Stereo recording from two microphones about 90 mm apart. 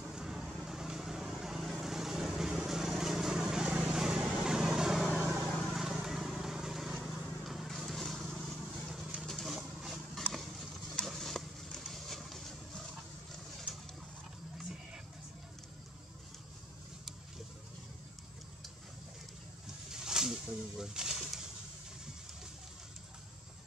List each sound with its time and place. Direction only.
0.0 s vehicle: 5° right (ahead or behind)
5.1 s vehicle: 25° right (ahead or behind)
5.8 s vehicle: 5° right (ahead or behind)
10.3 s a sound: centre (ahead or behind)
19.9 s bird: 5° right (ahead or behind)